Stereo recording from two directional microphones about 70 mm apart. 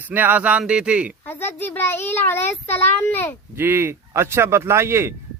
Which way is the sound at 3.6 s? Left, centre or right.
Right.